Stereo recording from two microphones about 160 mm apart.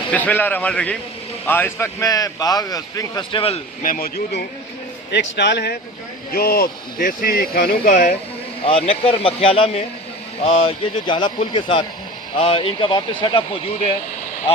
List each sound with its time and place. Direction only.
0.1 s a man's voice: 10° left (ahead or behind); by 3.6 s 35° left (ahead or behind)
3.8 s speech: 65° left (ahead or behind)
5.1 s speech: 90° left
6.3 s speech: 70° left (ahead or behind)
8.6 s a man's voice: 35° left (ahead or behind)
11.0 s a man's voice: 30° left (ahead or behind)